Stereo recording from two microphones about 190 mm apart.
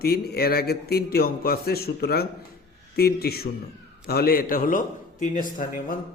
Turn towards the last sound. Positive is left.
turn(degrees=45)  # may be behind; listen again after turning